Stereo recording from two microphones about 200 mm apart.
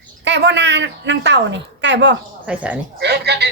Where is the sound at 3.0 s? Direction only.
55° right (ahead or behind).